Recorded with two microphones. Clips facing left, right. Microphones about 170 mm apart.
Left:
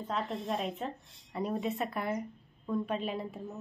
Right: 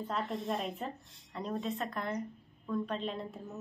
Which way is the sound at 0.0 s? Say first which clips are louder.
Left 1 dB; centre (ahead or behind).